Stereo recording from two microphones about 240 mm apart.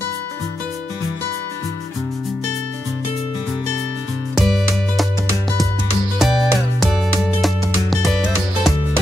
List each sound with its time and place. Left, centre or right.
4.4 s music: centre
6.1 s music: centre